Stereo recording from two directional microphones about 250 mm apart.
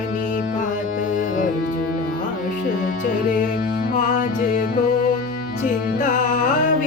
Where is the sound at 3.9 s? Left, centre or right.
Left.